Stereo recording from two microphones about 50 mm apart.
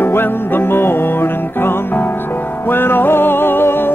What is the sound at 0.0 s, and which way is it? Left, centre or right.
Music, left.